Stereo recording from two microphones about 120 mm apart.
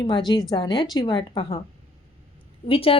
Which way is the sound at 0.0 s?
35° left (ahead or behind).